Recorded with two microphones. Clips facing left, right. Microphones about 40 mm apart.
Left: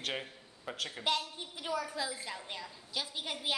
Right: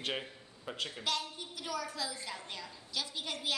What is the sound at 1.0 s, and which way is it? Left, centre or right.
A woman's voice, left.